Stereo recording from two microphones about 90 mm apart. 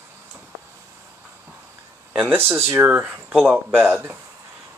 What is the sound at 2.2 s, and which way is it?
Speech, 25° right (ahead or behind).